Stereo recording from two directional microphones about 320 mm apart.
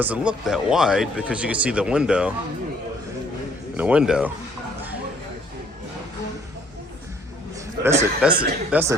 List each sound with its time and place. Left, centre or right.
0.0 s speech: centre
3.8 s speech: centre
7.9 s speech: centre